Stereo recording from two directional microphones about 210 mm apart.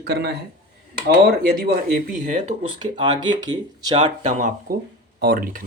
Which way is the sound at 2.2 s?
35° right (ahead or behind).